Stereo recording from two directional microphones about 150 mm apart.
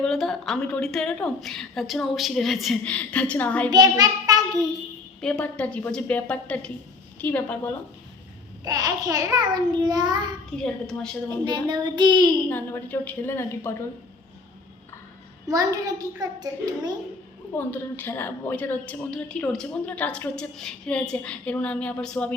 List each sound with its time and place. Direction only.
0.0 s a woman's voice: 5° left (ahead or behind)
3.7 s a child's voice: 25° right (ahead or behind)
5.2 s a woman's voice: 10° left (ahead or behind)
8.6 s a child's voice: 25° right (ahead or behind)
10.6 s a woman's voice: 5° left (ahead or behind)
11.4 s a child's voice: 30° right (ahead or behind)
12.5 s a woman's voice: 15° left (ahead or behind)
15.4 s a child's voice: 25° right (ahead or behind)
17.6 s a woman's voice: 10° left (ahead or behind)